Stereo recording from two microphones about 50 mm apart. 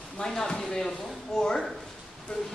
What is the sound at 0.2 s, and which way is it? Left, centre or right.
A woman's voice, centre.